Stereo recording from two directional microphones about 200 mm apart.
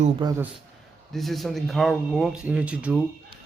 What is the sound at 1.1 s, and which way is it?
Speech, centre (ahead or behind).